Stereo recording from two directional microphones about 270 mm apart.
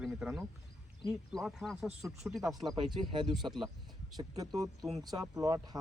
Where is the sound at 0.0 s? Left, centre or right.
Centre.